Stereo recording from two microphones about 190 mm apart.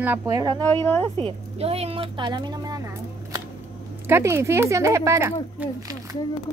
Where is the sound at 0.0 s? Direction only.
10° right (ahead or behind).